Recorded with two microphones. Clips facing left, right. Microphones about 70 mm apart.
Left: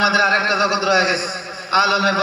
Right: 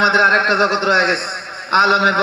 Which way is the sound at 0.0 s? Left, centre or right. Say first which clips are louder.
Right 3 dB; right.